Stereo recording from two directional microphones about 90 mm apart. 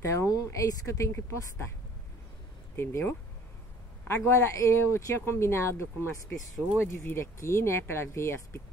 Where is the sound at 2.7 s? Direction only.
25° left (ahead or behind).